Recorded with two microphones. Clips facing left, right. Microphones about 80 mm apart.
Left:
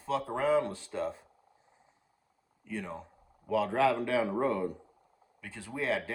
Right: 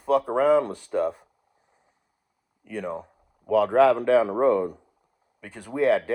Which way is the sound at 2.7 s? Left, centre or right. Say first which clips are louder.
Right 7 dB; right.